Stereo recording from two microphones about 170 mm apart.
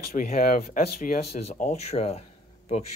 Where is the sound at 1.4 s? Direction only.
40° left (ahead or behind).